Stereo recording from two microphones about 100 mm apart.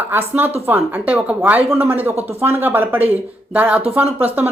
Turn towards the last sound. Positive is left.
turn(degrees=-20)  # may be behind; listen again after turning